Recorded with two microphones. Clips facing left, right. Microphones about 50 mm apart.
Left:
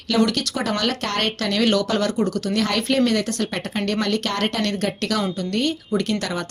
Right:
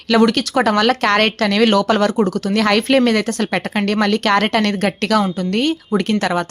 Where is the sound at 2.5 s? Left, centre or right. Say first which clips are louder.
Right 8 dB; right.